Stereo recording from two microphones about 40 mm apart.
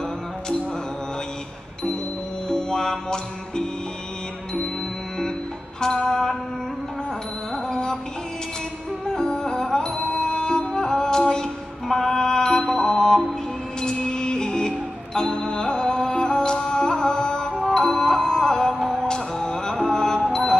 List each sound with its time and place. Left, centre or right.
2.4 s music: centre
5.8 s music: centre
7.5 s music: centre
9.0 s music: centre
19.0 s music: centre